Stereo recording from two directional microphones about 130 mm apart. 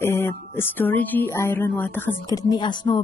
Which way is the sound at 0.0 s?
20° left (ahead or behind).